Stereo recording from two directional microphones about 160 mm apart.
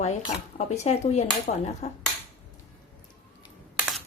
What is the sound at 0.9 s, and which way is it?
Speech, 45° left (ahead or behind).